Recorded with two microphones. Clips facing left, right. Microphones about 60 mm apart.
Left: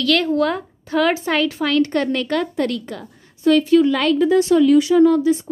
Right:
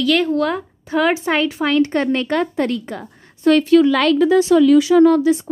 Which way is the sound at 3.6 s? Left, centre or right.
Right.